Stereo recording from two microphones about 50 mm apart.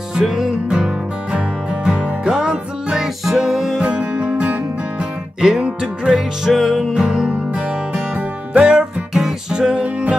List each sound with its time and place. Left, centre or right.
0.1 s music: centre
3.7 s music: right
5.4 s music: centre
6.9 s music: right
8.5 s music: centre